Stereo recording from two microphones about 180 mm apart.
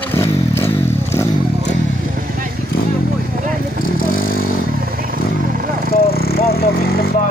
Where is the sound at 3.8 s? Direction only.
50° left (ahead or behind).